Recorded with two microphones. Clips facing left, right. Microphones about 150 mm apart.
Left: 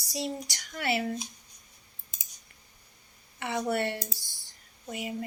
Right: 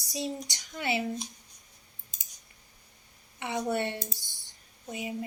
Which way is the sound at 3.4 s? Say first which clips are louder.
Left 1 dB; 20° right (ahead or behind).